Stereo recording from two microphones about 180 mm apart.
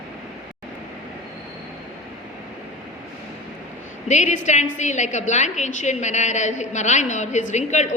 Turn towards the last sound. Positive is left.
turn(degrees=40)  # may be behind; listen again after turning